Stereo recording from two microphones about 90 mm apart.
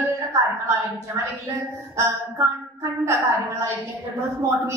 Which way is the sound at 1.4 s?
35° right (ahead or behind).